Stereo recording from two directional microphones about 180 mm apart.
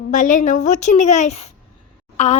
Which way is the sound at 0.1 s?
45° left (ahead or behind).